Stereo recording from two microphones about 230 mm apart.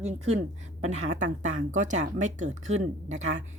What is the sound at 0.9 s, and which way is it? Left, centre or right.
Speech, right.